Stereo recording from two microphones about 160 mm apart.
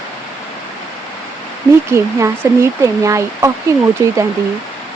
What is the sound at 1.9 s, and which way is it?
Speech, 15° right (ahead or behind).